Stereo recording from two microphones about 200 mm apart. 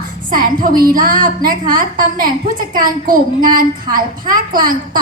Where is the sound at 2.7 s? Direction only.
45° right (ahead or behind).